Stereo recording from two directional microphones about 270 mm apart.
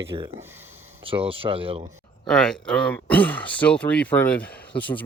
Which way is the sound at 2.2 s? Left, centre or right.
Centre.